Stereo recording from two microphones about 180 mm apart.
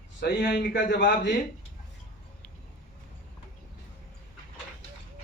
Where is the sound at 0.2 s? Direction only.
70° left (ahead or behind).